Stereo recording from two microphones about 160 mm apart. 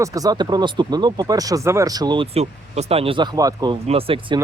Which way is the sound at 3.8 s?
35° right (ahead or behind).